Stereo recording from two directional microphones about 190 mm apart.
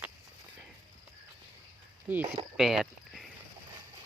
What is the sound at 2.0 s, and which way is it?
Speech, 10° right (ahead or behind).